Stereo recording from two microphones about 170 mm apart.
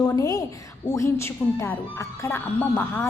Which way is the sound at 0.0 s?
20° left (ahead or behind).